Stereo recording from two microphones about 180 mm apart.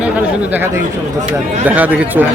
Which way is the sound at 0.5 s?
10° right (ahead or behind).